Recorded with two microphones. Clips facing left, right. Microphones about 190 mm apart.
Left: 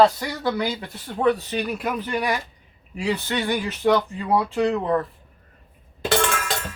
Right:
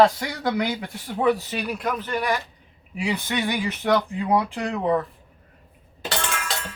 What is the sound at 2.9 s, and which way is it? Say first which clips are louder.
Speech: left 1 dB; 10° right (ahead or behind).